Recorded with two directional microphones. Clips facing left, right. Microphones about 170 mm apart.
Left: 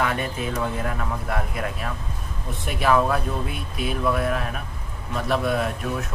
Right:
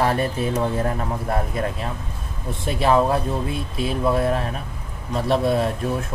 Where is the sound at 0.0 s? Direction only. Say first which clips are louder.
Right 4 dB; 35° right (ahead or behind).